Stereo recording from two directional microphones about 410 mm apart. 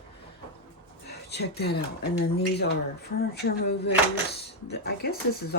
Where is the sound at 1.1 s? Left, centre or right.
Left.